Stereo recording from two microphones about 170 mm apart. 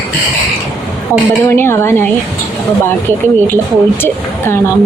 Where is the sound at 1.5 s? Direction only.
15° left (ahead or behind).